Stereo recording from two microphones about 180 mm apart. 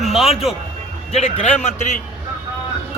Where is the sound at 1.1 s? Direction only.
40° left (ahead or behind).